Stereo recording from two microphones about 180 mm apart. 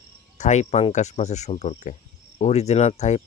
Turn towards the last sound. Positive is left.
turn(degrees=40)  # may be behind; listen again after turning